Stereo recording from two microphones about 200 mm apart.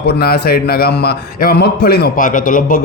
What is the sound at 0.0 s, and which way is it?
A man's voice, 50° left (ahead or behind).